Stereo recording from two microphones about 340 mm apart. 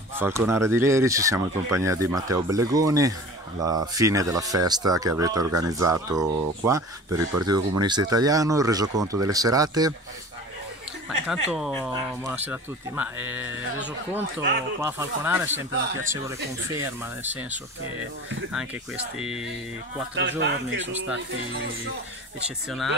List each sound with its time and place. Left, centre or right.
0.1 s speech: centre
11.2 s speech: centre
16.6 s speech: centre
19.1 s speech: centre
20.2 s speech: right